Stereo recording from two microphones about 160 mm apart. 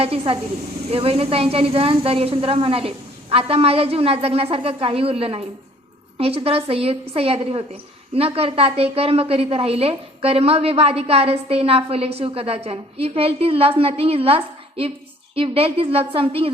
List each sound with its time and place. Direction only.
0.0 s a woman's voice: 35° right (ahead or behind)